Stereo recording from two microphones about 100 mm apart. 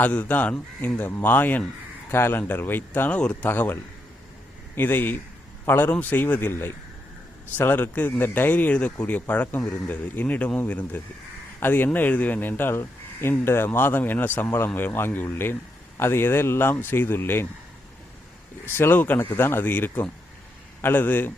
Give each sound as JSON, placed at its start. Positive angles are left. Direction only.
{"t": 0.0, "sound": "speech", "side_deg": 15}
{"t": 18.6, "sound": "speech", "side_deg": 20}